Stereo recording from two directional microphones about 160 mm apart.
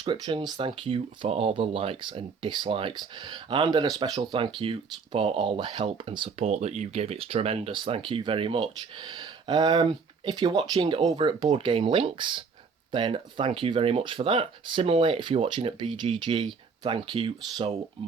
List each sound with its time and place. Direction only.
0.0 s speech: 30° right (ahead or behind)